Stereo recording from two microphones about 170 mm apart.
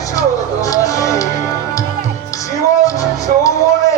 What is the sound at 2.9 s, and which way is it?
Music, 20° left (ahead or behind).